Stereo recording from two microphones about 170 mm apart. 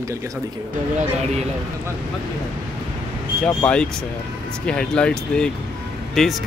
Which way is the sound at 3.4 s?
5° left (ahead or behind).